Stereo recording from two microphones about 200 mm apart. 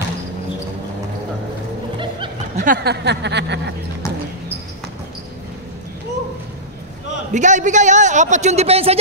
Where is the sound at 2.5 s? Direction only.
45° right (ahead or behind); by 3.7 s 60° right (ahead or behind).